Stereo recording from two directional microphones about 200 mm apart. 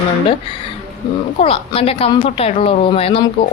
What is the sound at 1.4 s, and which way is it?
A woman's voice, 30° left (ahead or behind).